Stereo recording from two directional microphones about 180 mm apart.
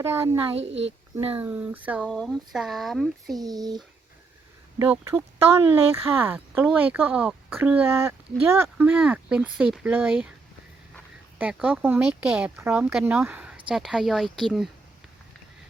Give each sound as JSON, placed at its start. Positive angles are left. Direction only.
{"t": 0.0, "sound": "speech", "side_deg": -15}
{"t": 3.4, "sound": "speech", "side_deg": -20}
{"t": 4.8, "sound": "speech", "side_deg": -10}
{"t": 11.3, "sound": "speech", "side_deg": -10}